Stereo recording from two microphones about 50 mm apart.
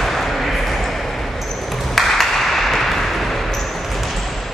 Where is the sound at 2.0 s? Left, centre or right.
Centre.